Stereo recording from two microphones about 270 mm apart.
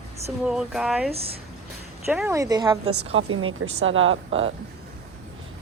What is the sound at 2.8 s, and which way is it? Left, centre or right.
A woman's voice, right.